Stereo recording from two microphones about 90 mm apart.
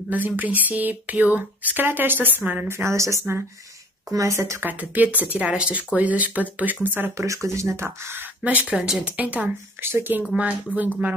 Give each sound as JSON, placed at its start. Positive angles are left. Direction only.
{"t": 0.1, "sound": "speech", "side_deg": -20}
{"t": 2.8, "sound": "speech", "side_deg": -35}
{"t": 4.6, "sound": "speech", "side_deg": -20}
{"t": 7.2, "sound": "speech", "side_deg": -35}
{"t": 8.7, "sound": "speech", "side_deg": -5}
{"t": 10.3, "sound": "speech", "side_deg": -15}